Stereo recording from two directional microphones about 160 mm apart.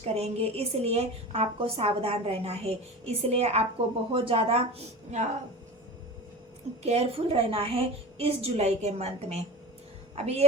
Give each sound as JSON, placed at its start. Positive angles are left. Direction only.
{"t": 0.0, "sound": "a woman's voice", "side_deg": -40}
{"t": 6.8, "sound": "a woman's voice", "side_deg": -40}